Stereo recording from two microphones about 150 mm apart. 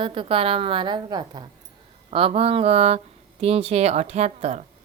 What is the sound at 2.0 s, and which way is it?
A woman's voice, 40° right (ahead or behind).